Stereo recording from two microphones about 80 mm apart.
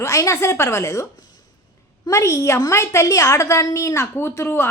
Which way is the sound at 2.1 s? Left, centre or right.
Left.